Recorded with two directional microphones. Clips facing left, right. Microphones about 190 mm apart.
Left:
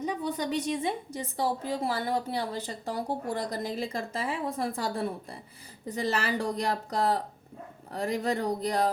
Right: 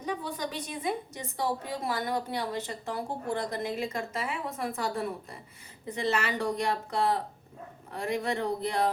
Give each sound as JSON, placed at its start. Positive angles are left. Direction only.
{"t": 0.0, "sound": "a woman's voice", "side_deg": 25}